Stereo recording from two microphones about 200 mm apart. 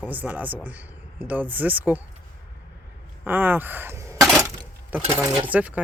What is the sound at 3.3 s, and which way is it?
Speech, 10° right (ahead or behind).